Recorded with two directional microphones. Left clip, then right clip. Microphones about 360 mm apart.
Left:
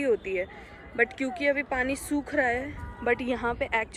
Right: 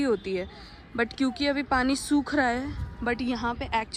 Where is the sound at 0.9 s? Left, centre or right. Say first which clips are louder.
Left 1 dB; centre.